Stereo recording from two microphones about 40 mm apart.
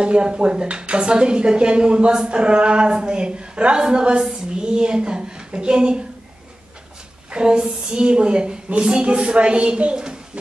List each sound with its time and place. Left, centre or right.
0.0 s a woman's voice: right
7.2 s a woman's voice: right